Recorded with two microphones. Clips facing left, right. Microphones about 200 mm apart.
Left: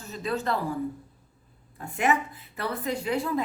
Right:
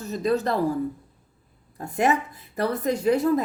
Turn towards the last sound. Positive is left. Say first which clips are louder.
# right 7 dB
turn(degrees=-40)  # may be behind; listen again after turning